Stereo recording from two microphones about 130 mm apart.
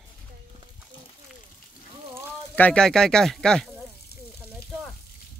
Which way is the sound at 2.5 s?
10° left (ahead or behind).